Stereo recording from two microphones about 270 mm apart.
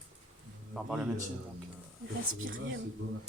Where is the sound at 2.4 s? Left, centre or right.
Right.